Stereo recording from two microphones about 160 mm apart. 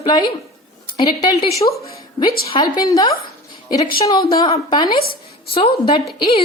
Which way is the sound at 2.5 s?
25° left (ahead or behind).